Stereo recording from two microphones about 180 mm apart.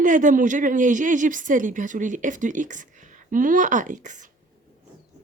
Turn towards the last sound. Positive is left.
turn(degrees=-45)  # may be behind; listen again after turning